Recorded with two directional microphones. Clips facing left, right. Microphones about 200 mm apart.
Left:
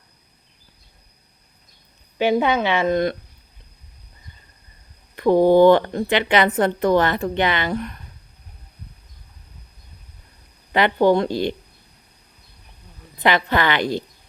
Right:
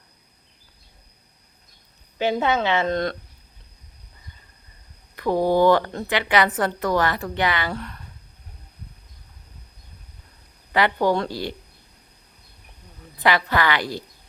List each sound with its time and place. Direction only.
2.1 s a woman's voice: 15° left (ahead or behind)
5.1 s a woman's voice: 20° left (ahead or behind)
10.7 s a woman's voice: 20° left (ahead or behind)
13.2 s a woman's voice: 20° left (ahead or behind)